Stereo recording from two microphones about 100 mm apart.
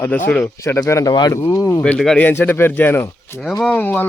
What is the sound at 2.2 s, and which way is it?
A man's voice, 20° left (ahead or behind).